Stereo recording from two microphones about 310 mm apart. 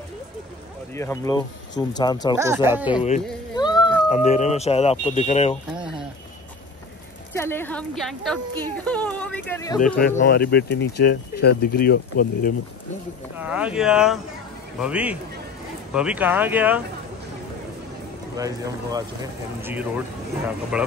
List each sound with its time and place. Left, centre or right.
0.9 s speech: centre
2.3 s speech: centre
2.9 s speech: centre
7.3 s speech: centre
9.9 s speech: left
13.4 s speech: centre
18.3 s speech: centre